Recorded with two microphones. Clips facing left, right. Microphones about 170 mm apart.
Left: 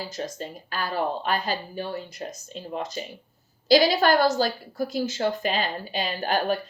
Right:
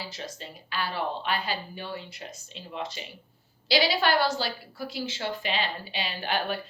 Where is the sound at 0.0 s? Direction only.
45° left (ahead or behind).